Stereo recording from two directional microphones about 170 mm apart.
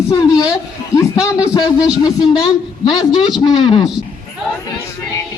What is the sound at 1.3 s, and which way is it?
Speech, 25° left (ahead or behind).